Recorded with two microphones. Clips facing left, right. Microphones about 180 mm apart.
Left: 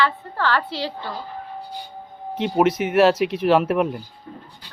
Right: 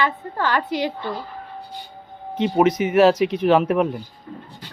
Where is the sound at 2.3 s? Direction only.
Centre (ahead or behind).